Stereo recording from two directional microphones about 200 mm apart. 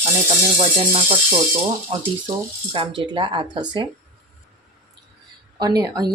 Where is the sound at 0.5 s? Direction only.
25° right (ahead or behind).